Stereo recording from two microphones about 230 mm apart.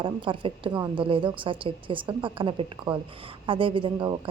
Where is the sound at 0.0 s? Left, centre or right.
Right.